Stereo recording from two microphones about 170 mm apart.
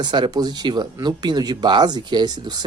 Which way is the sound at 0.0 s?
25° right (ahead or behind).